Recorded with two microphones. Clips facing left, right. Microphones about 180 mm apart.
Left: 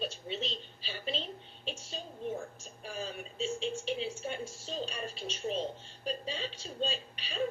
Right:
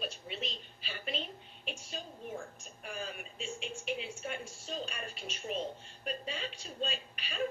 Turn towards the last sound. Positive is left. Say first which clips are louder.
# left 2 dB
turn(degrees=30)  # may be behind; listen again after turning